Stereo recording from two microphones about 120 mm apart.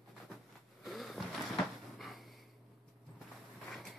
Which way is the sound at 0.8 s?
Centre (ahead or behind).